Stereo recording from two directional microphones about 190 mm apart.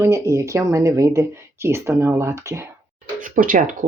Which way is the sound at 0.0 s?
15° right (ahead or behind).